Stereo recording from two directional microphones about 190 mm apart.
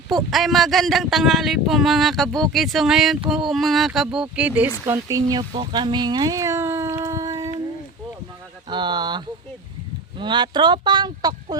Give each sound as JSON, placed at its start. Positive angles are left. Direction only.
{"t": 0.1, "sound": "speech", "side_deg": 0}
{"t": 8.7, "sound": "speech", "side_deg": -25}